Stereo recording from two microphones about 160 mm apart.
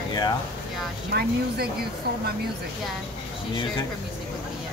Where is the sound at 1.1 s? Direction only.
75° right (ahead or behind).